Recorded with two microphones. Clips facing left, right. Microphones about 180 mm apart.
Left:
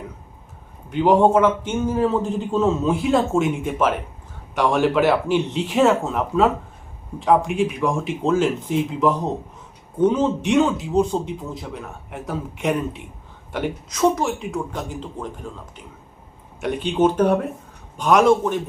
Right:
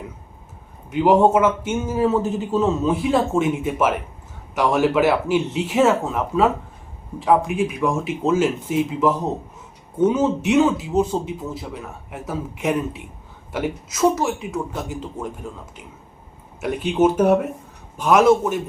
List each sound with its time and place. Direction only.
0.9 s a man's voice: 5° right (ahead or behind)
16.6 s a man's voice: 5° right (ahead or behind)